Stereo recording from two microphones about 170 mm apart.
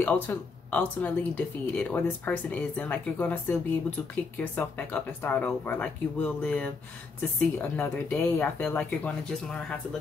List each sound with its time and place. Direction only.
0.0 s speech: 10° left (ahead or behind)